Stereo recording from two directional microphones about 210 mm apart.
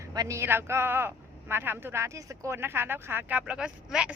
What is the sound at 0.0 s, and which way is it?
Speech, 15° right (ahead or behind).